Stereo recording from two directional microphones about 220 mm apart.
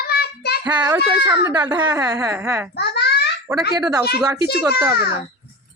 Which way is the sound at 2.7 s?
50° left (ahead or behind).